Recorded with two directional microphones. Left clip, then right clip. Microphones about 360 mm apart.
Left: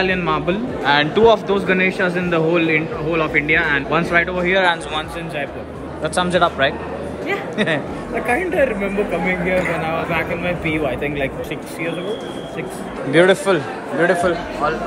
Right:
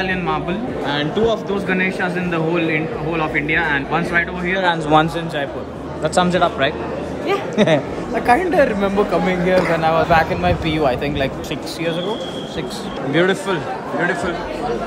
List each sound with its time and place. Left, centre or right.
0.0 s speech: centre
4.9 s speech: right
6.0 s speech: centre
7.2 s a sound: centre
8.3 s speech: centre
13.2 s speech: centre